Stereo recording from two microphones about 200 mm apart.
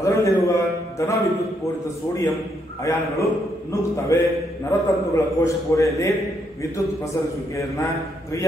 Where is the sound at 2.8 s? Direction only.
15° left (ahead or behind).